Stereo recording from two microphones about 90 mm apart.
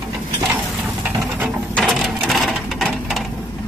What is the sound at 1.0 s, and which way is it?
Patter, 20° right (ahead or behind).